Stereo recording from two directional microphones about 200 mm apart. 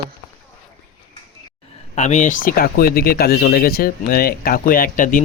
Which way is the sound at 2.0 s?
35° left (ahead or behind).